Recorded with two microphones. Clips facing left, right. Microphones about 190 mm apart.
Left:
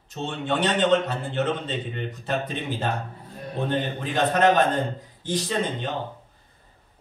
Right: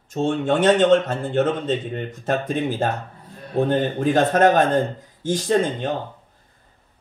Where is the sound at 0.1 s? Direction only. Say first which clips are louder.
Right 7 dB; 45° right (ahead or behind).